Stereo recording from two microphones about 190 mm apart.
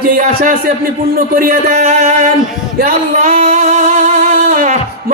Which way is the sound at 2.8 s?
40° right (ahead or behind).